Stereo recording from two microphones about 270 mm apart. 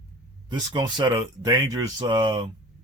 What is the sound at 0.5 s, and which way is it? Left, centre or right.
Speech, centre.